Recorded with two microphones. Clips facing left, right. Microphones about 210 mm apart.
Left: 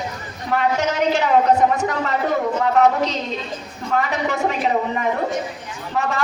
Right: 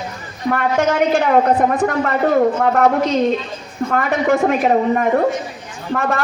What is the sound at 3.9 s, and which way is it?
A man's voice, 55° right (ahead or behind).